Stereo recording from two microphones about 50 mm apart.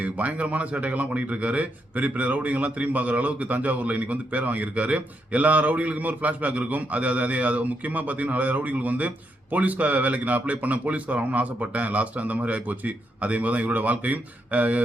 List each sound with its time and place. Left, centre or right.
0.0 s speech: right